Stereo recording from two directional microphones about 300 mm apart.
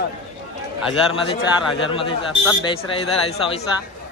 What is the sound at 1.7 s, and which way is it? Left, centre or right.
A man's voice, centre.